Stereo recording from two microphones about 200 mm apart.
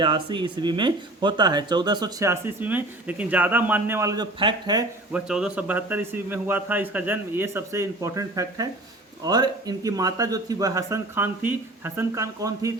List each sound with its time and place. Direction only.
0.0 s speech: 25° right (ahead or behind)
5.1 s a man's voice: 5° right (ahead or behind)